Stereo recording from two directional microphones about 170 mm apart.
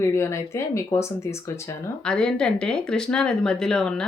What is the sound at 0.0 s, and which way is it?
Speech, 15° left (ahead or behind).